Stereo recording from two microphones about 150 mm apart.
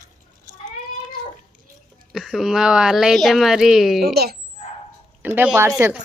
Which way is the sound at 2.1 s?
Centre (ahead or behind).